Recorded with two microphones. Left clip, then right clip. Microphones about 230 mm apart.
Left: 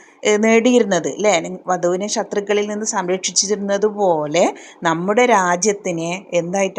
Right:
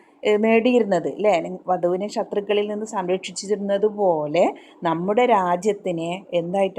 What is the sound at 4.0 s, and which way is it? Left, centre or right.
Speech, left.